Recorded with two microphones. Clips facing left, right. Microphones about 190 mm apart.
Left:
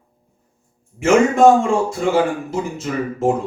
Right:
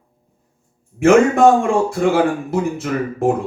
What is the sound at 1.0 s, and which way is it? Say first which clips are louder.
Speech: right 1 dB; 60° right (ahead or behind).